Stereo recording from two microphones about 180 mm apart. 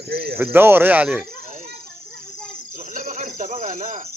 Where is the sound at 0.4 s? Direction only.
10° right (ahead or behind).